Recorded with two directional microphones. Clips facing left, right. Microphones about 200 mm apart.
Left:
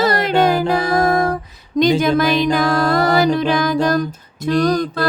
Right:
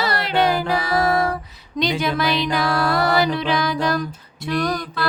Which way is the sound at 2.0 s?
45° left (ahead or behind).